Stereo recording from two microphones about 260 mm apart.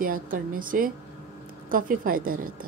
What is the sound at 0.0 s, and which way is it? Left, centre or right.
A woman's voice, right.